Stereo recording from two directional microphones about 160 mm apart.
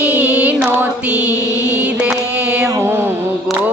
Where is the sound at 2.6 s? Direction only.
15° right (ahead or behind).